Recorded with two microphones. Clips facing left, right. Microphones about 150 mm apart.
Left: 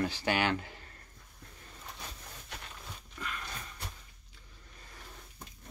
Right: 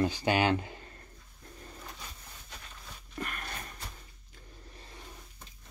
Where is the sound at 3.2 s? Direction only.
55° right (ahead or behind).